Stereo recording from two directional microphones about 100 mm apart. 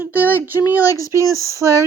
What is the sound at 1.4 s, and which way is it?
Speech, 30° right (ahead or behind).